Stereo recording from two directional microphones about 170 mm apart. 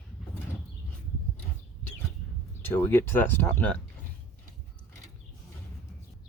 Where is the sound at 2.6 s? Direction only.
10° left (ahead or behind).